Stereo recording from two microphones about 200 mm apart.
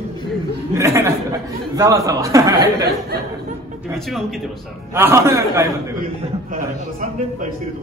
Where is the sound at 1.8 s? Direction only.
15° right (ahead or behind).